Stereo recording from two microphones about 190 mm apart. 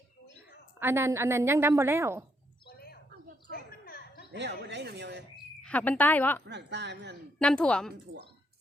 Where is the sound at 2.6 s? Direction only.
55° left (ahead or behind).